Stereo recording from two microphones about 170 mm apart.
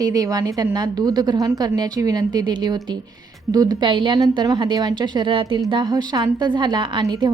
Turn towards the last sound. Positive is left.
turn(degrees=-25)  # may be behind; listen again after turning